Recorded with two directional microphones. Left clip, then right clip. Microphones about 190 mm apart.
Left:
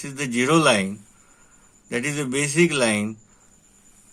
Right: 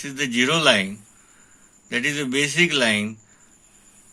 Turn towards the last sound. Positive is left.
turn(degrees=45)  # may be behind; listen again after turning